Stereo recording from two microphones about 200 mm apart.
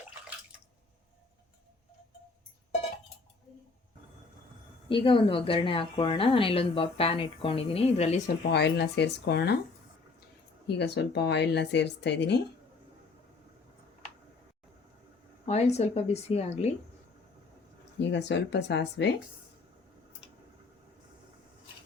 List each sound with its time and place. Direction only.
4.9 s speech: 25° left (ahead or behind)
8.5 s speech: 55° left (ahead or behind)
10.7 s speech: 55° left (ahead or behind)
15.4 s a woman's voice: 35° left (ahead or behind)
18.0 s speech: 60° left (ahead or behind)